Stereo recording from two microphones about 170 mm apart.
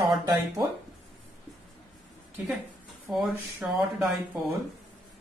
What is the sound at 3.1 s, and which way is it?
Speech, centre (ahead or behind).